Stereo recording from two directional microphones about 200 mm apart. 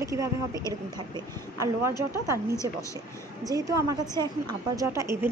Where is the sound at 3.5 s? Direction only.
15° right (ahead or behind).